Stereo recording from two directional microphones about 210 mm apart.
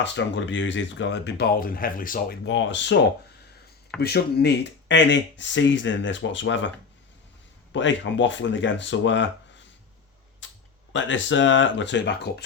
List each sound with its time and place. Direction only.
0.0 s speech: 60° left (ahead or behind)
7.7 s speech: 60° left (ahead or behind)
10.4 s a sound: 60° left (ahead or behind)
10.9 s speech: 60° left (ahead or behind)